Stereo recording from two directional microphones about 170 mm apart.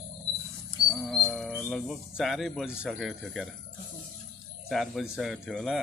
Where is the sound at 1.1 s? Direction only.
Centre (ahead or behind).